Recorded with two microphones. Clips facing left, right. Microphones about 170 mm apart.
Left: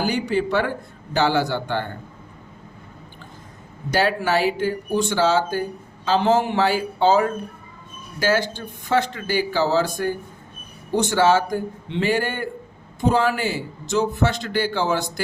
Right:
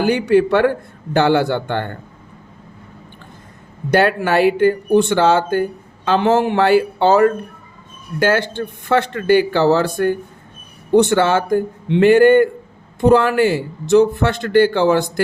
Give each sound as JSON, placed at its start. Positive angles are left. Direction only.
{"t": 0.0, "sound": "a man's voice", "side_deg": -60}
{"t": 3.9, "sound": "a man's voice", "side_deg": -60}